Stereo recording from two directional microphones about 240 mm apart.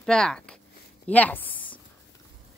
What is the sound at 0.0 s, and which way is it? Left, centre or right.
A woman's voice, centre.